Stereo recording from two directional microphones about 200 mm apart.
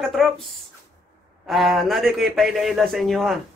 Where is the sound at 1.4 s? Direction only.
Centre (ahead or behind).